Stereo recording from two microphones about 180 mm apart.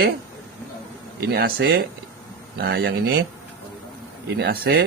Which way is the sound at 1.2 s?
65° right (ahead or behind).